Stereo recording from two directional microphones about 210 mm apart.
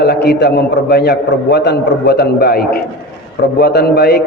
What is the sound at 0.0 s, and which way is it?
A man's voice, 50° left (ahead or behind).